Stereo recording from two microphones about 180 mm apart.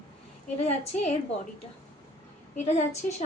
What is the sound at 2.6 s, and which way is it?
Speech, 40° left (ahead or behind).